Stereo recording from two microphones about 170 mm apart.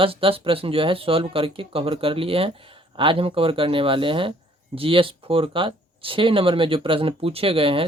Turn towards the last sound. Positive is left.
turn(degrees=-30)  # may be behind; listen again after turning